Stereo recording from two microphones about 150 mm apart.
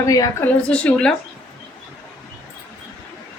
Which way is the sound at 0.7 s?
5° left (ahead or behind).